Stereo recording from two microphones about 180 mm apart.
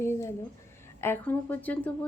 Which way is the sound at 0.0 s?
15° left (ahead or behind).